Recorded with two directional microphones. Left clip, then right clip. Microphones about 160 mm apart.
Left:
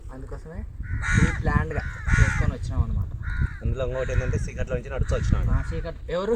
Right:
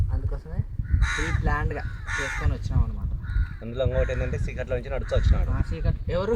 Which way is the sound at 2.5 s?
Centre (ahead or behind).